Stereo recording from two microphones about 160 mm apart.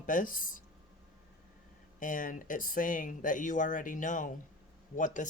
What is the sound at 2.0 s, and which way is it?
Speech, 55° left (ahead or behind).